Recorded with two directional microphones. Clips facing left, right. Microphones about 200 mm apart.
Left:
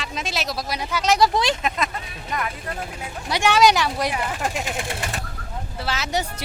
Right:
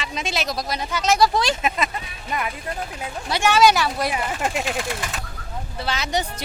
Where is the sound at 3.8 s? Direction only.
10° right (ahead or behind).